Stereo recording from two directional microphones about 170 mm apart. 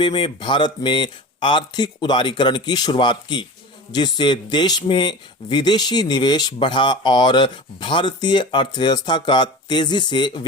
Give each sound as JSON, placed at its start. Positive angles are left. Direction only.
{"t": 0.0, "sound": "speech", "side_deg": 25}